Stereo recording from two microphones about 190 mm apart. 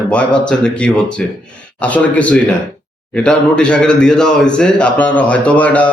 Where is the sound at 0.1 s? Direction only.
5° left (ahead or behind).